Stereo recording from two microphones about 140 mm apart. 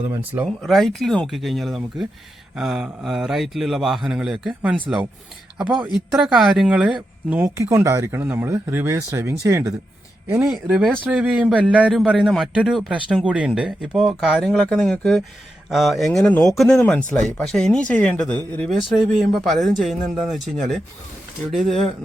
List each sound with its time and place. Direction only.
0.1 s a man's voice: 10° right (ahead or behind)
0.4 s a man's voice: centre (ahead or behind)
6.1 s a man's voice: 5° right (ahead or behind)
7.4 s speech: 20° right (ahead or behind)
10.4 s a man's voice: 5° right (ahead or behind)